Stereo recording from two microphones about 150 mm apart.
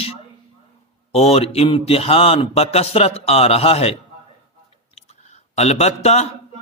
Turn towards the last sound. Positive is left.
turn(degrees=45)  # may be behind; listen again after turning